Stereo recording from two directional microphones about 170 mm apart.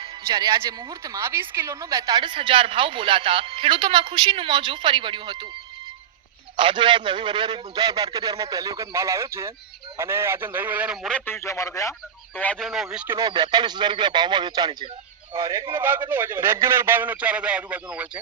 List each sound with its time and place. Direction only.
0.0 s speech: 25° right (ahead or behind)
6.6 s a man's voice: 30° right (ahead or behind); by 11.1 s 5° right (ahead or behind)
11.1 s speech: 15° left (ahead or behind)
12.4 s speech: 5° left (ahead or behind)
13.2 s a man's voice: 25° right (ahead or behind)
15.7 s a man's voice: 10° right (ahead or behind)